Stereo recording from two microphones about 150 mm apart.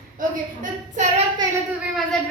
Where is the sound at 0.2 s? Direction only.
60° right (ahead or behind).